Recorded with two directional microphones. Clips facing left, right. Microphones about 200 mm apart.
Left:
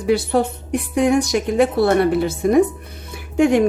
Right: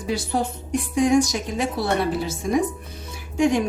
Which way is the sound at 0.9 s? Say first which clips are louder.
Left 2 dB; 60° left (ahead or behind).